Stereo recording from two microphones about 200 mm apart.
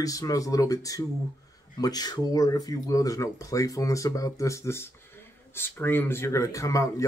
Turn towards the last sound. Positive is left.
turn(degrees=15)  # may be behind; listen again after turning